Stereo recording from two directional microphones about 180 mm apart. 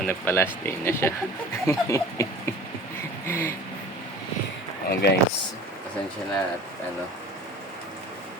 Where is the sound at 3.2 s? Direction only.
15° left (ahead or behind).